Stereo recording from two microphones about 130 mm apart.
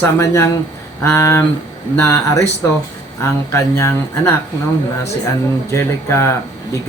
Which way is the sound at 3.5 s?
20° left (ahead or behind).